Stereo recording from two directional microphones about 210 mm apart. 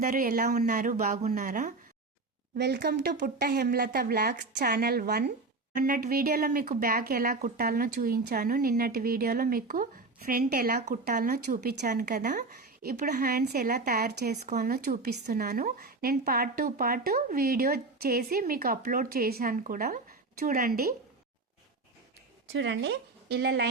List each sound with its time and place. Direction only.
0.0 s a woman's voice: 40° right (ahead or behind)
2.6 s a woman's voice: 50° right (ahead or behind)
22.5 s a woman's voice: 60° right (ahead or behind)